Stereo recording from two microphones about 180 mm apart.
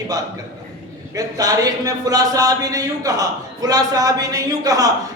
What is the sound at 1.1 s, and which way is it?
A woman's voice, 20° right (ahead or behind).